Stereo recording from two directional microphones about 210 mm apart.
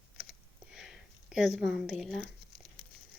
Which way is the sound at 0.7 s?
Centre (ahead or behind).